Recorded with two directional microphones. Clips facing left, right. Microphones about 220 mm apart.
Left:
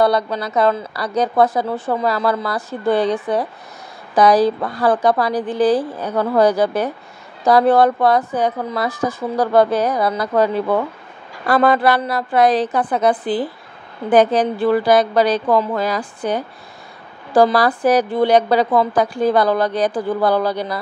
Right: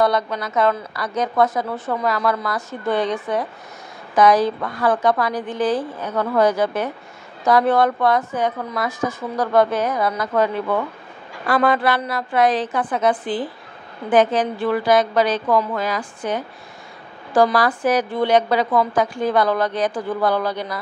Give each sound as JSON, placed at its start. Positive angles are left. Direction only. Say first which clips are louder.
{"t": 0.0, "sound": "a woman's voice", "louder": "left 3 dB", "side_deg": 35}